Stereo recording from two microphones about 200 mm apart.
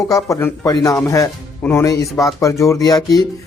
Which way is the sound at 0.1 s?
15° left (ahead or behind).